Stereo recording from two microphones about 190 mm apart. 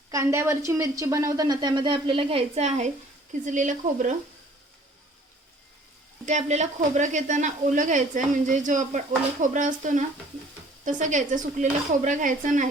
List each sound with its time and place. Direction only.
0.1 s a woman's voice: 15° right (ahead or behind); by 4.1 s 40° right (ahead or behind)
6.2 s speech: 40° right (ahead or behind)